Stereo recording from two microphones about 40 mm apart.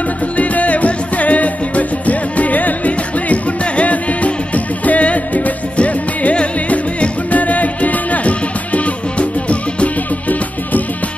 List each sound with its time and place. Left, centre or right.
0.4 s music: left